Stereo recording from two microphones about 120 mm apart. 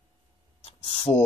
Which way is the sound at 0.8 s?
45° left (ahead or behind).